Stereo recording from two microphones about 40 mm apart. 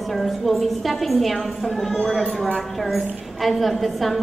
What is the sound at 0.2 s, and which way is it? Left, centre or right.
A woman's voice, centre.